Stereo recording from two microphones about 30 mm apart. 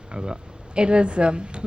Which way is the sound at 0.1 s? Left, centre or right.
Right.